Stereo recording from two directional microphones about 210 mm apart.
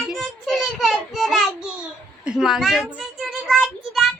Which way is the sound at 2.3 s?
5° right (ahead or behind).